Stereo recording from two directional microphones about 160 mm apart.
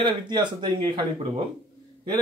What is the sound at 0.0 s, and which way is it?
Speech, 30° right (ahead or behind).